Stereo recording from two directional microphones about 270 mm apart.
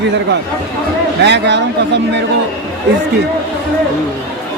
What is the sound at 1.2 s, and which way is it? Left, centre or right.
Speech, right.